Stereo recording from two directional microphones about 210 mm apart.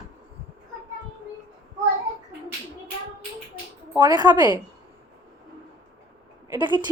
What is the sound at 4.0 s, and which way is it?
Speech, 20° right (ahead or behind).